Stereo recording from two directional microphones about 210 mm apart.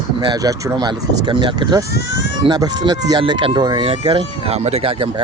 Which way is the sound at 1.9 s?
55° left (ahead or behind).